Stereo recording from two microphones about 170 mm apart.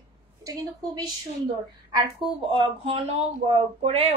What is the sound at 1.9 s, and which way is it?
Speech, 30° right (ahead or behind).